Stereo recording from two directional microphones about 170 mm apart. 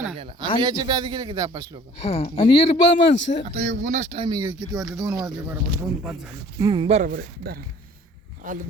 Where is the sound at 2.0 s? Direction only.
40° left (ahead or behind).